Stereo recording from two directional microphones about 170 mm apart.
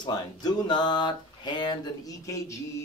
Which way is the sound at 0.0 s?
25° left (ahead or behind).